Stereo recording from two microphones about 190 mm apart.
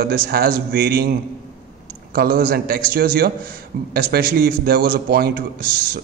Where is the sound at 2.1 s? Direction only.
50° right (ahead or behind).